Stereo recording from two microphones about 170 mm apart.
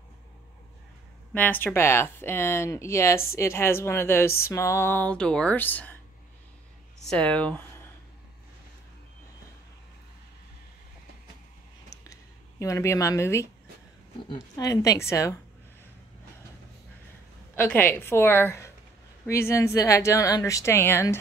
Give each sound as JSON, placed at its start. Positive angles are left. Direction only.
{"t": 1.3, "sound": "speech", "side_deg": 10}
{"t": 7.1, "sound": "speech", "side_deg": 5}
{"t": 12.0, "sound": "a sound", "side_deg": 20}
{"t": 14.3, "sound": "a woman's voice", "side_deg": 20}
{"t": 17.6, "sound": "speech", "side_deg": 10}